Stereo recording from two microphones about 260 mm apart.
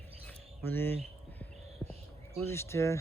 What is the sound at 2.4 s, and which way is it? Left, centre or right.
Speech, centre.